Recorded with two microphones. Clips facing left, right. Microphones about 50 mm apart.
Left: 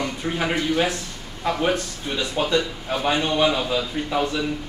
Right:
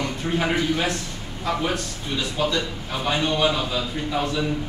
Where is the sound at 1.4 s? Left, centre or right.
Centre.